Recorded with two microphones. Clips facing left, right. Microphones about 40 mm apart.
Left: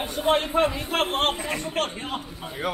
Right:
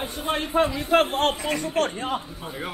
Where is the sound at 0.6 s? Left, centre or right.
Left.